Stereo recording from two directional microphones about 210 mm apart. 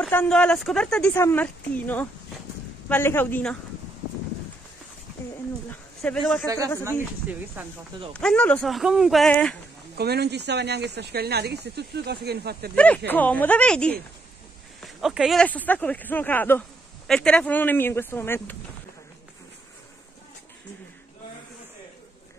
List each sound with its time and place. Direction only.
0.0 s speech: 5° left (ahead or behind)
6.0 s speech: 5° left (ahead or behind)
6.4 s speech: 15° right (ahead or behind)
8.1 s speech: 5° left (ahead or behind)
9.9 s speech: 50° right (ahead or behind)
12.7 s speech: 5° left (ahead or behind)